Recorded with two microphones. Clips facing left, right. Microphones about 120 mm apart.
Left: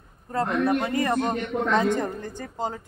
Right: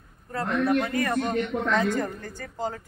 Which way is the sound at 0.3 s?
20° left (ahead or behind).